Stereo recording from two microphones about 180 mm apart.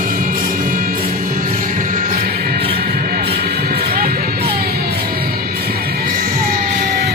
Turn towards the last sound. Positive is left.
turn(degrees=-60)  # may be behind; listen again after turning